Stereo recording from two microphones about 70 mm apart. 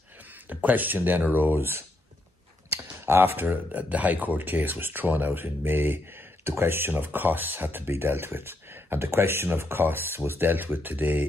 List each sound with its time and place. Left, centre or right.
0.5 s speech: right